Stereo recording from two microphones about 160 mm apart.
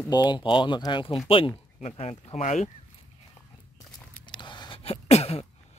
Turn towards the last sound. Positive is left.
turn(degrees=40)  # may be behind; listen again after turning